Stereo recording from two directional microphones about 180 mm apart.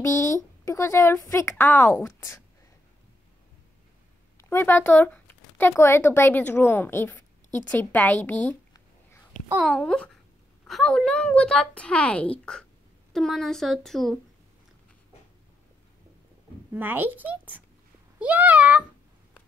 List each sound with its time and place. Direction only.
0.0 s a woman's voice: 15° left (ahead or behind)
4.4 s speech: 15° left (ahead or behind)
9.7 s a woman's voice: 5° left (ahead or behind)
16.7 s a woman's voice: 10° right (ahead or behind)